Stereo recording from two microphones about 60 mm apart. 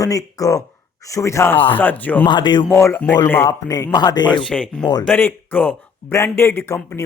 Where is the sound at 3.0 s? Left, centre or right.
Left.